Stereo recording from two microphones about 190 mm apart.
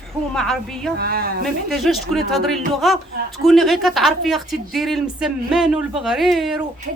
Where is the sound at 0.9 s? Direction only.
55° right (ahead or behind).